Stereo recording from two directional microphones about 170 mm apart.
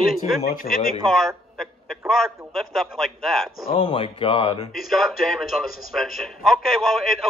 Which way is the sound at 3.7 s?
30° left (ahead or behind).